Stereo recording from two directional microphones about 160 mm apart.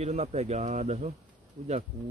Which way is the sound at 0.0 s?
45° right (ahead or behind).